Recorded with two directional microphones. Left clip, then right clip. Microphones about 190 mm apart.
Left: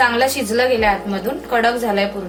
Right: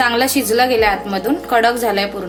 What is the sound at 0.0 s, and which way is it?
A woman's voice, 60° right (ahead or behind).